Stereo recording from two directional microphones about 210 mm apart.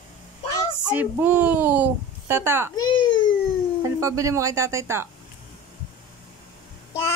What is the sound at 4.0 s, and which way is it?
Speech, 15° right (ahead or behind).